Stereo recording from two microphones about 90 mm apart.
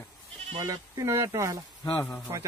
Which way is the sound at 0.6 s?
40° right (ahead or behind).